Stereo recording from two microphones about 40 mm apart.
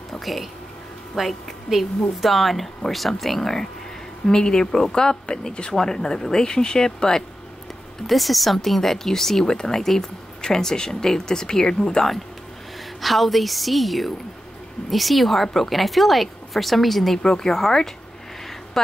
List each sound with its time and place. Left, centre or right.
0.2 s a woman's voice: centre
8.1 s a woman's voice: centre
13.0 s a woman's voice: centre
17.2 s a woman's voice: centre